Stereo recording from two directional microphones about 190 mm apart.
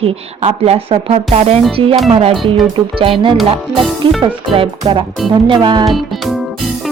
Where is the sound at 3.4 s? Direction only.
Centre (ahead or behind).